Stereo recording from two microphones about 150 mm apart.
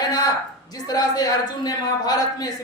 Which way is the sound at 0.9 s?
25° left (ahead or behind).